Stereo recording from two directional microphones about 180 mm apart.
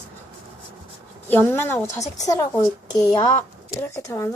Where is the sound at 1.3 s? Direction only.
10° left (ahead or behind).